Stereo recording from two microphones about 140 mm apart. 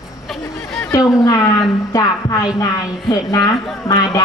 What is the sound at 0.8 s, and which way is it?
A man's voice, 25° left (ahead or behind).